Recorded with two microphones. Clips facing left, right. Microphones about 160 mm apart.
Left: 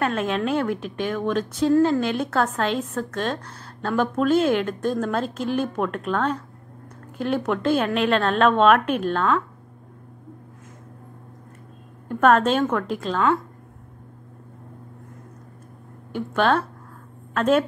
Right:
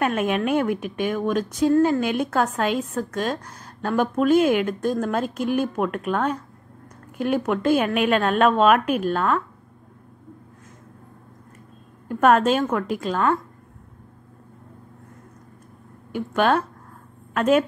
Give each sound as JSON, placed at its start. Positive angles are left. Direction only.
{"t": 0.0, "sound": "a woman's voice", "side_deg": -15}
{"t": 12.1, "sound": "a woman's voice", "side_deg": -5}
{"t": 16.1, "sound": "a woman's voice", "side_deg": -10}